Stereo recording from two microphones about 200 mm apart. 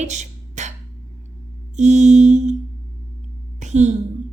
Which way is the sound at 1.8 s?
35° right (ahead or behind).